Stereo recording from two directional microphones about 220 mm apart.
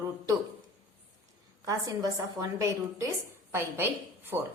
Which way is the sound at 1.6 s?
15° right (ahead or behind).